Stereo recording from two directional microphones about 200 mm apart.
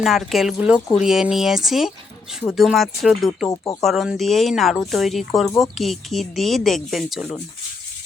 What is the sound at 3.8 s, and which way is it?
Speech, centre (ahead or behind).